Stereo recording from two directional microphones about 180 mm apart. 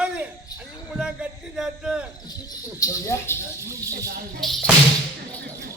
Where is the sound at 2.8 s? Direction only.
15° left (ahead or behind).